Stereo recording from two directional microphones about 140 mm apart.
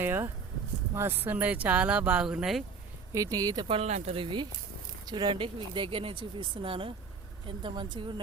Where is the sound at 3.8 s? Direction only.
50° right (ahead or behind).